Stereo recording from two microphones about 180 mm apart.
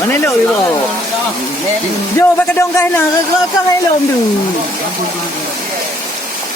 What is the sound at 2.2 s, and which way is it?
Speech, 20° left (ahead or behind).